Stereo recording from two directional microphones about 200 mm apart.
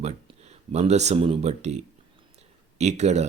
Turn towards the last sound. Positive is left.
turn(degrees=-35)  # may be behind; listen again after turning